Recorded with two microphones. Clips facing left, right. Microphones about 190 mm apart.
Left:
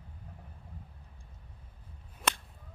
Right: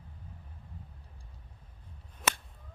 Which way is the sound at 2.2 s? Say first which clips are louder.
Right 1 dB; centre (ahead or behind).